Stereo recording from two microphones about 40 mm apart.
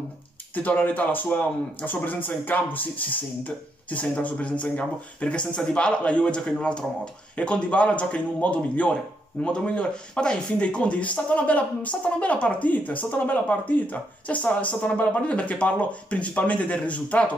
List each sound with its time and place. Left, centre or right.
0.6 s speech: left